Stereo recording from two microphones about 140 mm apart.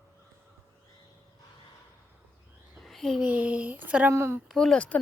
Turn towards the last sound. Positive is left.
turn(degrees=10)  # may be behind; listen again after turning